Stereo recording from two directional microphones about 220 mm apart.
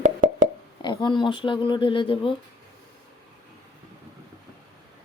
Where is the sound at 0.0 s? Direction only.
35° right (ahead or behind).